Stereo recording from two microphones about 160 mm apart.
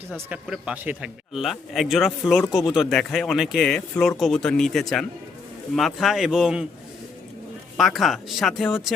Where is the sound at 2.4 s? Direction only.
20° left (ahead or behind).